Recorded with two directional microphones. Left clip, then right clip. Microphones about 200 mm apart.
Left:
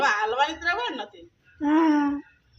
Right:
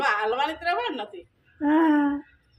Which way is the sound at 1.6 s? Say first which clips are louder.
Even; 15° right (ahead or behind).